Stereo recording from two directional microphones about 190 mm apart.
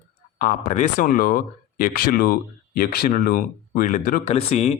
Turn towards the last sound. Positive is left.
turn(degrees=35)  # may be behind; listen again after turning